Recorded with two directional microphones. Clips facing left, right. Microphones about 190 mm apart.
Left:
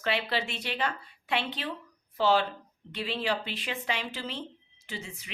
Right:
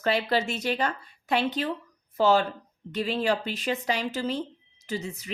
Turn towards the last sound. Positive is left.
turn(degrees=-40)  # may be behind; listen again after turning